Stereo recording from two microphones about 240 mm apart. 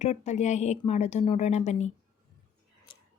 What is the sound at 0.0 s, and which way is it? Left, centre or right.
Speech, left.